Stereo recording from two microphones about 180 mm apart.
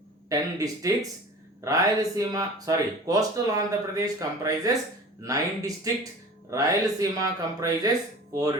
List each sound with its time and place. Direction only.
0.3 s speech: 20° right (ahead or behind)